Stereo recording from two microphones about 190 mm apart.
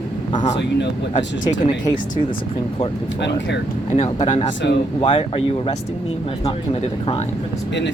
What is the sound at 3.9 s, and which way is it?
Speech, 35° left (ahead or behind).